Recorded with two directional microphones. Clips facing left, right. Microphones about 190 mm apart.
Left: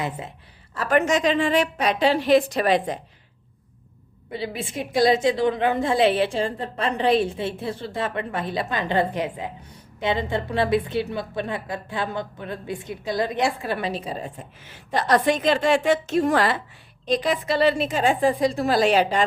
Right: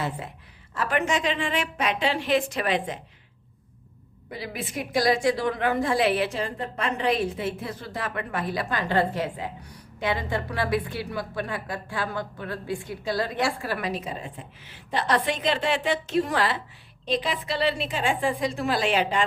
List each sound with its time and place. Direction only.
0.7 s a woman's voice: 40° left (ahead or behind)
4.3 s a woman's voice: 25° left (ahead or behind)
14.6 s a woman's voice: 45° left (ahead or behind)